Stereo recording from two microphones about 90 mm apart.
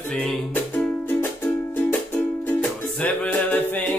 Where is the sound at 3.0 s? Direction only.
20° left (ahead or behind).